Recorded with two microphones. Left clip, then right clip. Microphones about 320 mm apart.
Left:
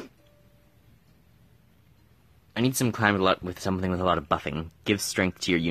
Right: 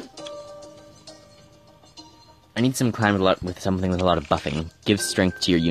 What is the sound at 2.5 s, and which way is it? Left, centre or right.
Speech, centre.